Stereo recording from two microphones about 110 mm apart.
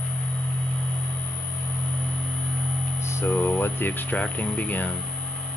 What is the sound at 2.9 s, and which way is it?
Speech, 25° left (ahead or behind).